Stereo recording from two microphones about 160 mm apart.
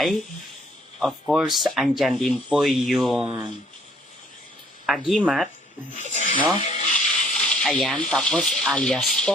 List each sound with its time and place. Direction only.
0.9 s speech: centre (ahead or behind)
4.9 s speech: centre (ahead or behind)
6.0 s speech: 50° left (ahead or behind)
6.9 s speech: 5° left (ahead or behind)